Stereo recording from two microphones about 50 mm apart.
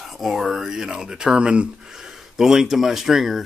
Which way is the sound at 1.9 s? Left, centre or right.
Centre.